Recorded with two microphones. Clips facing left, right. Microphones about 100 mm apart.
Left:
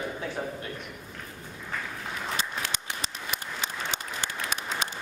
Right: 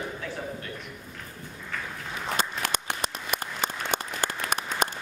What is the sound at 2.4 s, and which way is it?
Applause, 55° right (ahead or behind).